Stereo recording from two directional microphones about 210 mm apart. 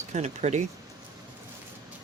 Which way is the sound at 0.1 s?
35° right (ahead or behind).